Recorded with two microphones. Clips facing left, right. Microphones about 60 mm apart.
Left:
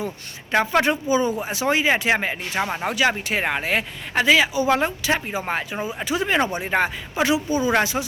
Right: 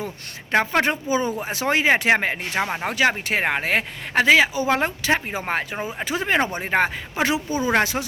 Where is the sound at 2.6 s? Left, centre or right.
Right.